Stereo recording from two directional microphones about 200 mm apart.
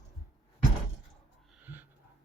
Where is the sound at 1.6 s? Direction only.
10° right (ahead or behind).